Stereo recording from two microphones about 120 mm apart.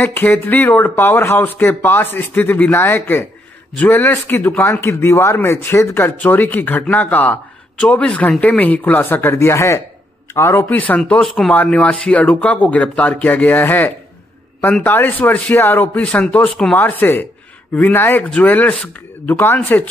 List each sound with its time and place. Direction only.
0.0 s a man's voice: 20° left (ahead or behind)
10.8 s a man's voice: 10° left (ahead or behind)